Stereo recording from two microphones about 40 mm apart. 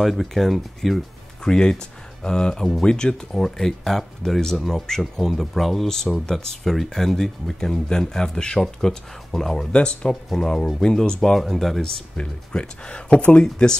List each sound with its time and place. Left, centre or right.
0.0 s speech: centre
1.4 s speech: centre
9.7 s speech: left
11.3 s speech: centre
12.2 s speech: left